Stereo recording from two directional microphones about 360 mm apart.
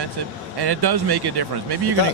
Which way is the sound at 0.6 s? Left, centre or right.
Right.